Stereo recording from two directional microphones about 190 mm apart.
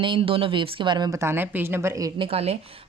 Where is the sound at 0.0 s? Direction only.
25° right (ahead or behind).